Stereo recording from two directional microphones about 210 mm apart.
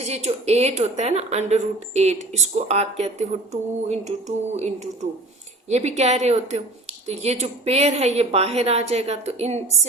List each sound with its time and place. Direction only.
0.1 s speech: 30° right (ahead or behind)